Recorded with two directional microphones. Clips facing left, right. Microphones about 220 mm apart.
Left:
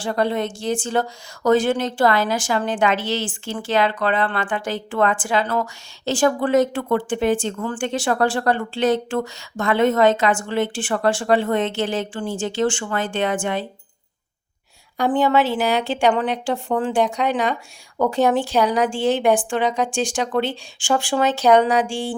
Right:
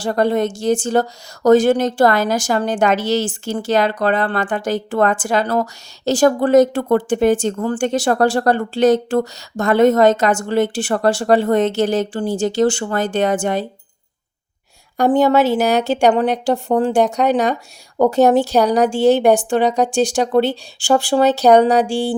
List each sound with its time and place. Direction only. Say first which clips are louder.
0.0 s a woman's voice: right 5 dB; 45° right (ahead or behind)
14.9 s a woman's voice: right 5 dB; 40° right (ahead or behind)